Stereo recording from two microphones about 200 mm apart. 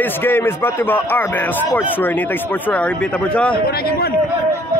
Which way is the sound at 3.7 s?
50° left (ahead or behind).